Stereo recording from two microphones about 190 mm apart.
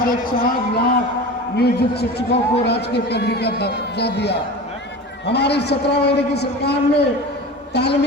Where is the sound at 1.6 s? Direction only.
55° left (ahead or behind).